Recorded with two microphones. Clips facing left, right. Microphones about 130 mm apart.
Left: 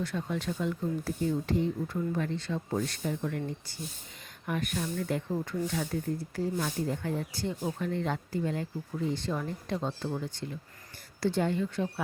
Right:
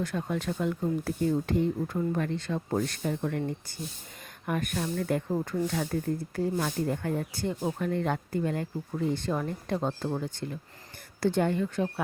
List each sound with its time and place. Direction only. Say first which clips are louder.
0.0 s speech: right 2 dB; 50° right (ahead or behind)